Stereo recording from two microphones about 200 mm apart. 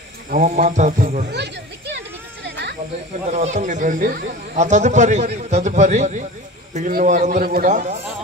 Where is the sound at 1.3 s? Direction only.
60° right (ahead or behind).